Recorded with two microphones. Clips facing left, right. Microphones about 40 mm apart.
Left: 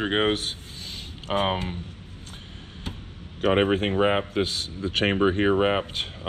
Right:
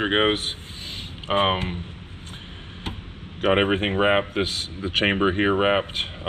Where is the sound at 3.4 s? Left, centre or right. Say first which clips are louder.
Right 1 dB; right.